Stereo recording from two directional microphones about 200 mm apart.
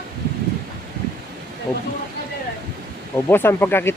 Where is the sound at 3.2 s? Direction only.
10° left (ahead or behind).